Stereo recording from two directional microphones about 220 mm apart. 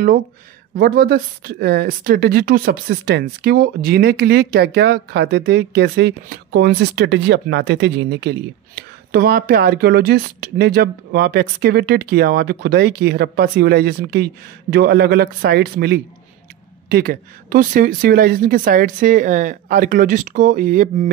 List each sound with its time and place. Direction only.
0.7 s speech: 45° right (ahead or behind)